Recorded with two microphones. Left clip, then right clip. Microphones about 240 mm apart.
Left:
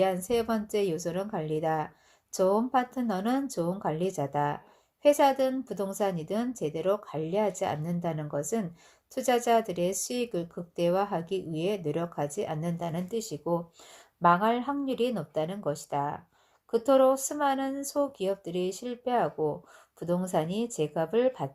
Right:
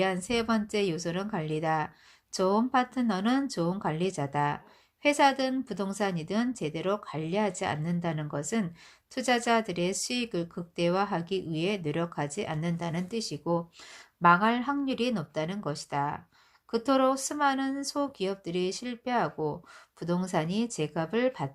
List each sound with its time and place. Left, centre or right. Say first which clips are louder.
0.0 s speech: left 2 dB; right